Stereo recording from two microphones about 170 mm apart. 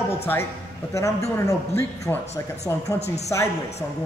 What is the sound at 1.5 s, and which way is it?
Speech, 15° left (ahead or behind).